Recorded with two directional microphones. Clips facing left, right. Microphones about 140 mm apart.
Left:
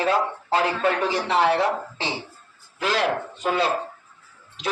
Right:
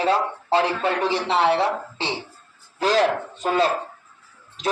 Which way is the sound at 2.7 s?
35° right (ahead or behind).